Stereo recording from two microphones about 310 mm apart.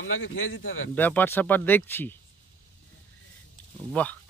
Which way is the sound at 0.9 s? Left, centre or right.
Centre.